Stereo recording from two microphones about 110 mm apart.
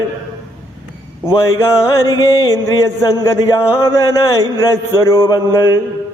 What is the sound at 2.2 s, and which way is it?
Speech, 25° left (ahead or behind).